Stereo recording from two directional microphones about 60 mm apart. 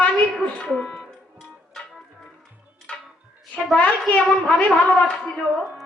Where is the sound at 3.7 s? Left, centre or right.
Left.